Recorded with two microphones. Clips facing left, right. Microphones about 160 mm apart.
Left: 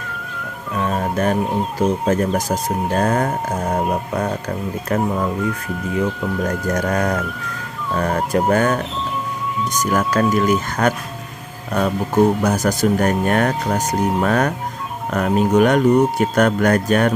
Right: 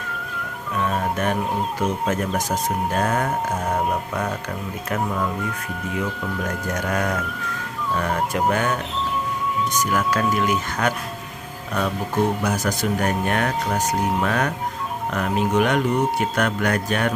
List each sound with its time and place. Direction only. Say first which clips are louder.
0.8 s music: left 3 dB; 35° left (ahead or behind)
1.8 s speech: left 8 dB; 35° left (ahead or behind)
6.4 s speech: left 6 dB; 40° left (ahead or behind)
9.9 s speech: left 6 dB; 40° left (ahead or behind)